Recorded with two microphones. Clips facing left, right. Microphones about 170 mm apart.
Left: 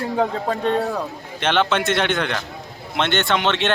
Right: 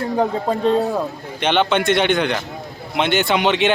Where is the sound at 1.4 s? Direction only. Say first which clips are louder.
Right 2 dB; centre (ahead or behind).